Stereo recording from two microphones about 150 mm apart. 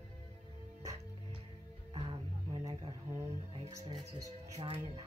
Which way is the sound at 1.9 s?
35° right (ahead or behind).